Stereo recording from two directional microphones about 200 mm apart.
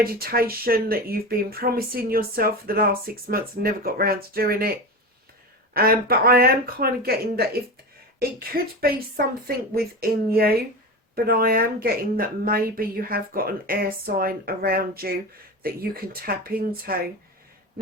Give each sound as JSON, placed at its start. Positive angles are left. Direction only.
{"t": 0.0, "sound": "speech", "side_deg": -50}
{"t": 5.7, "sound": "speech", "side_deg": -50}